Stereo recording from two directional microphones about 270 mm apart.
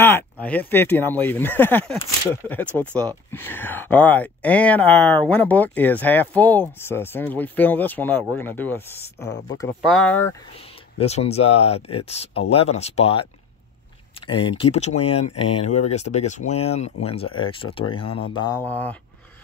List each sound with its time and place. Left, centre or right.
0.0 s speech: centre
11.0 s speech: left
18.7 s speech: centre